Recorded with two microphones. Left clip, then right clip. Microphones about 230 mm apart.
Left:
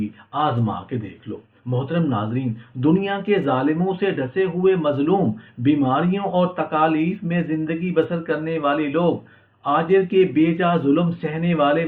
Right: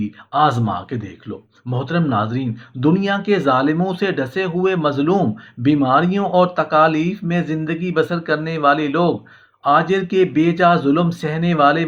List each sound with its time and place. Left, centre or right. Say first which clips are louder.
0.3 s speech: right 6 dB; right